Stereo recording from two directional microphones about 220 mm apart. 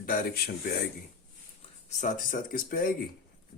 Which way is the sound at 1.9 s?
35° left (ahead or behind).